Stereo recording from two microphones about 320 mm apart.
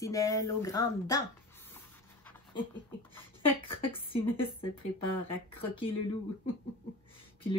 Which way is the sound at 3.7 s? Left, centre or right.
Centre.